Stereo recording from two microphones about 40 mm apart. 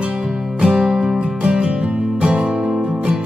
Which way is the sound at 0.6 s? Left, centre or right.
Centre.